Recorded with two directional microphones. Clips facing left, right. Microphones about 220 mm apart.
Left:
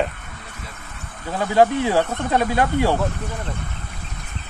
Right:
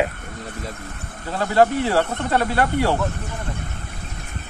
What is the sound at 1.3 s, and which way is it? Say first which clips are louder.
Speech: left 1 dB; 15° left (ahead or behind).